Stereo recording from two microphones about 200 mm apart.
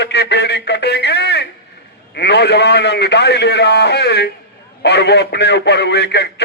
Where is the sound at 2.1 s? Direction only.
55° left (ahead or behind).